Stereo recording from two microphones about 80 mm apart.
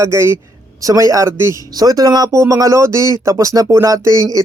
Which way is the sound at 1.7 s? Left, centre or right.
Right.